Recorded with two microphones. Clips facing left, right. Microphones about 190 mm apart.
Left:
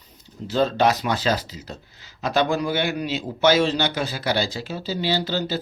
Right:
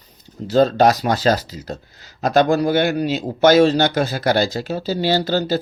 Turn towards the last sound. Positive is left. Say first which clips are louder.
# right 6 dB
turn(degrees=-45)  # may be behind; listen again after turning